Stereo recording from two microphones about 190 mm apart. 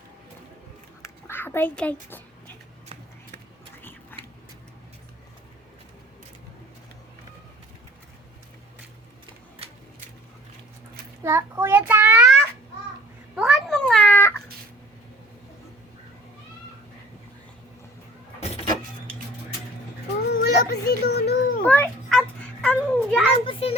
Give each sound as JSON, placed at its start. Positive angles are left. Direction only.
{"t": 1.0, "sound": "speech", "side_deg": 10}
{"t": 11.2, "sound": "child singing", "side_deg": -15}
{"t": 13.3, "sound": "cat", "side_deg": 0}
{"t": 20.4, "sound": "a sound", "side_deg": 60}
{"t": 21.6, "sound": "a sound", "side_deg": 10}
{"t": 23.3, "sound": "children playing", "side_deg": 30}